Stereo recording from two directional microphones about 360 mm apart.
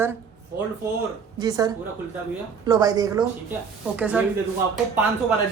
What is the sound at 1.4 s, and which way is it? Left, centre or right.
A woman's voice, centre.